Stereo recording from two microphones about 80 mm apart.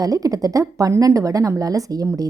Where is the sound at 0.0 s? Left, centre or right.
Right.